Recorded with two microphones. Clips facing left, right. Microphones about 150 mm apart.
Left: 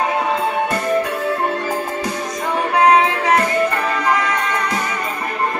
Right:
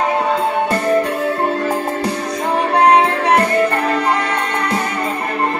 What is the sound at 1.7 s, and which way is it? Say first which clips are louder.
Music: right 3 dB; 65° right (ahead or behind).